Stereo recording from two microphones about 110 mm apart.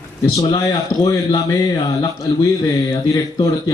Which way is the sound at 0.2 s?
35° left (ahead or behind).